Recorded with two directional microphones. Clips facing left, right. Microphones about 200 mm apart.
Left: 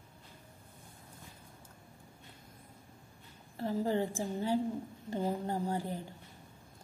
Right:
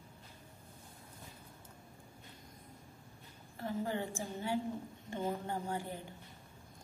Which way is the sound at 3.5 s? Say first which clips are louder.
Left 5 dB; 35° left (ahead or behind).